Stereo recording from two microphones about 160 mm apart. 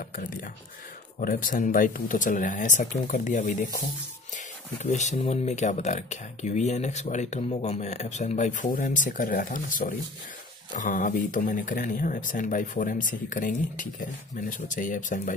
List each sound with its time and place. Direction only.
1.2 s speech: 55° left (ahead or behind)